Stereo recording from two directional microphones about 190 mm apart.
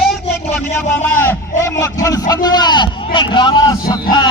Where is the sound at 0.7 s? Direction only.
10° left (ahead or behind).